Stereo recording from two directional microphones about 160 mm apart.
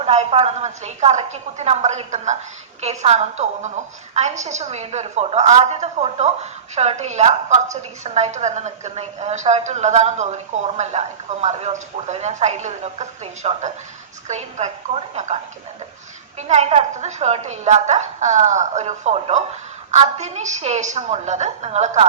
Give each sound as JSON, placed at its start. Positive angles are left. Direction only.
{"t": 0.0, "sound": "a woman's voice", "side_deg": -40}
{"t": 16.4, "sound": "a woman's voice", "side_deg": -45}